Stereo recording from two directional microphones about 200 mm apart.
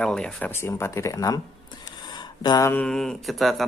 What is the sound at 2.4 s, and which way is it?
Speech, 20° left (ahead or behind).